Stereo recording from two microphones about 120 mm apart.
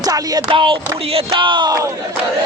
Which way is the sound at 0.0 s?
30° right (ahead or behind).